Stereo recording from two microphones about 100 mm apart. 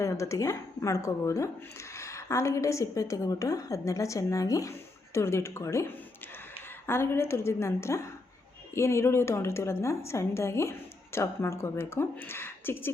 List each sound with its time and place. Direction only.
0.0 s a woman's voice: 30° left (ahead or behind)